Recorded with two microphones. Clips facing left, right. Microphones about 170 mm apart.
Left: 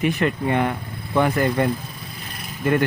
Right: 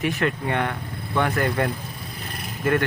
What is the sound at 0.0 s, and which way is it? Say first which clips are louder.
Speech: left 3 dB; centre (ahead or behind).